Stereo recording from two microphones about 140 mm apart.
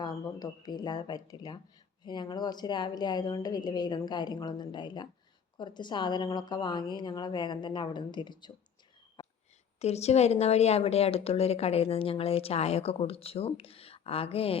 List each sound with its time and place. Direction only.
0.0 s a woman's voice: 30° left (ahead or behind)
9.2 s whispering: 35° left (ahead or behind)
9.7 s a woman's voice: 50° left (ahead or behind)